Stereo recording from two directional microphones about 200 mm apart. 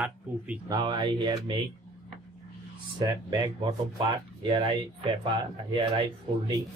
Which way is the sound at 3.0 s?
20° right (ahead or behind).